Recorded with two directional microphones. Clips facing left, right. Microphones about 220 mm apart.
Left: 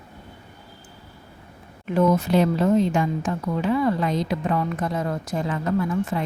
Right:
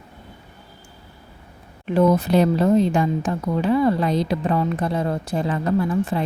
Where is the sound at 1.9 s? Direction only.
35° right (ahead or behind).